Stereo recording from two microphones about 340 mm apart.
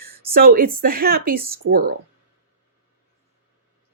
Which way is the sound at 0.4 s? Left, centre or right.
Right.